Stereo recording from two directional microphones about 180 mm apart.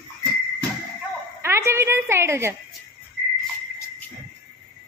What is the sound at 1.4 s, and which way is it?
A woman's voice, 15° right (ahead or behind).